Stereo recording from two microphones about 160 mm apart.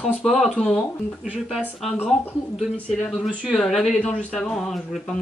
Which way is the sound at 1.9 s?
15° left (ahead or behind).